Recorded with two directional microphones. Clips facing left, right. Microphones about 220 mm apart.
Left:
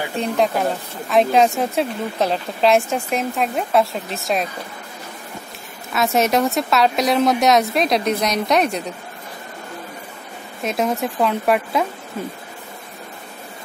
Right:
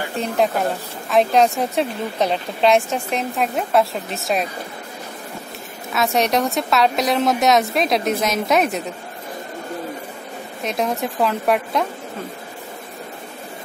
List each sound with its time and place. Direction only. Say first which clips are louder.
0.2 s a woman's voice: even; centre (ahead or behind)
5.9 s a woman's voice: left 1 dB; centre (ahead or behind)
10.6 s a woman's voice: left 2 dB; centre (ahead or behind)